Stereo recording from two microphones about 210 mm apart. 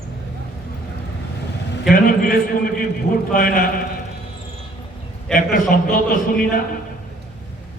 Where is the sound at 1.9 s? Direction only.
40° left (ahead or behind).